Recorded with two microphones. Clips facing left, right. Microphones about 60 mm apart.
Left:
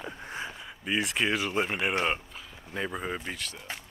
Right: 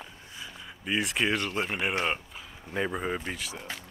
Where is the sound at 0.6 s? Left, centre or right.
Centre.